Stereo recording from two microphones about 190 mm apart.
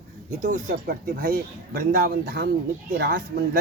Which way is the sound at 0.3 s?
45° right (ahead or behind).